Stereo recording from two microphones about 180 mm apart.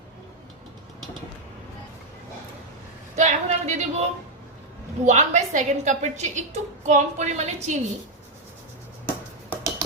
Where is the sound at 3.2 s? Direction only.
40° right (ahead or behind).